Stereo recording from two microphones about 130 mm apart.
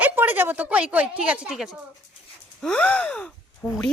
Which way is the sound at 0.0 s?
15° right (ahead or behind).